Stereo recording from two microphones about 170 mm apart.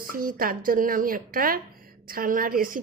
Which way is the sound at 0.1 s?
55° right (ahead or behind).